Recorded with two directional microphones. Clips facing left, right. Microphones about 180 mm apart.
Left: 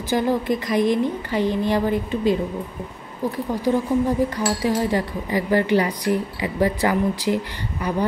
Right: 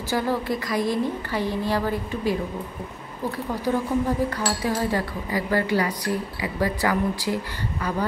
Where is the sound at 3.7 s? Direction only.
15° left (ahead or behind).